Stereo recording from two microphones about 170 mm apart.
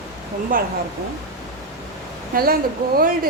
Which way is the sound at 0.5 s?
55° right (ahead or behind).